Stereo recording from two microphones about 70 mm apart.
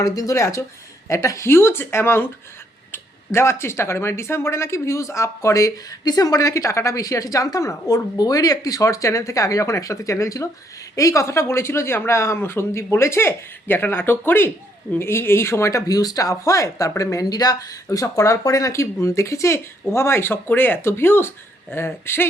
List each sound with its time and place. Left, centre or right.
0.0 s a woman's voice: left
6.1 s a woman's voice: left
15.9 s a woman's voice: left
17.8 s a woman's voice: left